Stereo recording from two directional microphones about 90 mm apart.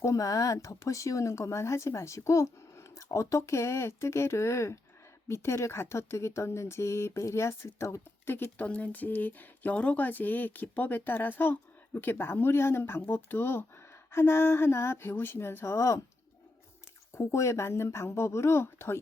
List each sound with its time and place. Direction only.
0.0 s speech: 40° left (ahead or behind)
17.2 s speech: 35° left (ahead or behind)